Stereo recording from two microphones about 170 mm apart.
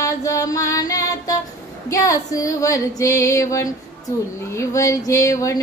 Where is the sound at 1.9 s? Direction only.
20° left (ahead or behind).